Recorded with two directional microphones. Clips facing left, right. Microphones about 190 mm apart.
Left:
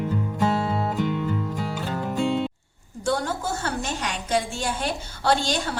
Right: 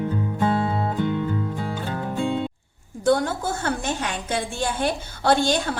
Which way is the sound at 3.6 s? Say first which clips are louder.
Right 3 dB; 55° right (ahead or behind).